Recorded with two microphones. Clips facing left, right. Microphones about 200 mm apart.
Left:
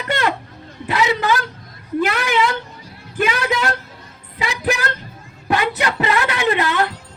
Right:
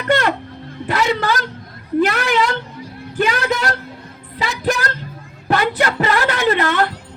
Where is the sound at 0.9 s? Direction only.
45° right (ahead or behind).